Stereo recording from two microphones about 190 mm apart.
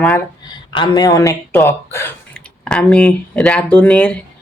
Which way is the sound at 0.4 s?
25° left (ahead or behind).